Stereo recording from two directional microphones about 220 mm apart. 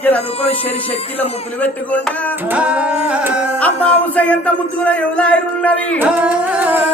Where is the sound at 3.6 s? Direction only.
5° left (ahead or behind).